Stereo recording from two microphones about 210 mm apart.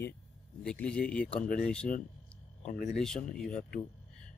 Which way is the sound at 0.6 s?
5° left (ahead or behind).